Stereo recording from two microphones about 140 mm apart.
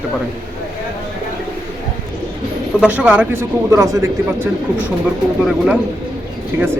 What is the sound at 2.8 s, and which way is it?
Speech, 10° right (ahead or behind).